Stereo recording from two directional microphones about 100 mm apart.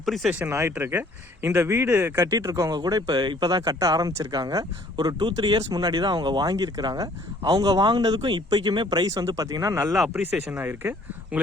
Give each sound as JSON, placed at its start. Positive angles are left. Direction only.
{"t": 0.0, "sound": "speech", "side_deg": 0}
{"t": 0.3, "sound": "speech", "side_deg": -20}
{"t": 10.1, "sound": "speech", "side_deg": -15}